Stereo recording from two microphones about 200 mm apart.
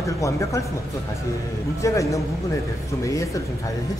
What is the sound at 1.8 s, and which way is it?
Speech, 15° left (ahead or behind).